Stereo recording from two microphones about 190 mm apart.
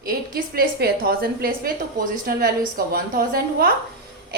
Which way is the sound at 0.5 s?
55° right (ahead or behind).